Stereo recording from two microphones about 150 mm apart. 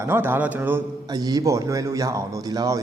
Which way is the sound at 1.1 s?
25° right (ahead or behind).